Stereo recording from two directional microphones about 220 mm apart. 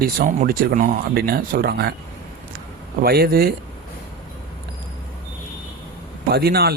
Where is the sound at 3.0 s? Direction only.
45° right (ahead or behind).